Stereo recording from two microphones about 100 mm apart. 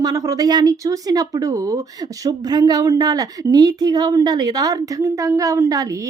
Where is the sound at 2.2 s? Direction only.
40° right (ahead or behind).